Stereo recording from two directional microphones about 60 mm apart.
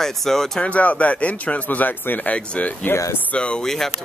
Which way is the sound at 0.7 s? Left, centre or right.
Left.